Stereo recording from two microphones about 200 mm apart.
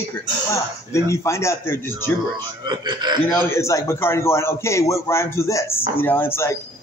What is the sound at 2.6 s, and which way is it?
Speech, 20° right (ahead or behind).